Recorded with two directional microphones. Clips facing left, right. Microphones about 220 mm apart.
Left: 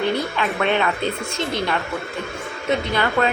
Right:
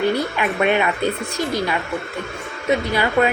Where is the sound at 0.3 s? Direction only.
10° right (ahead or behind).